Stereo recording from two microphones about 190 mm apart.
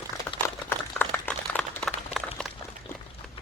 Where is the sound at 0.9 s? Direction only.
10° left (ahead or behind).